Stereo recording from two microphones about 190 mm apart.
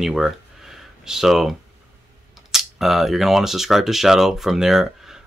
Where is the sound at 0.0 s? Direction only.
Centre (ahead or behind).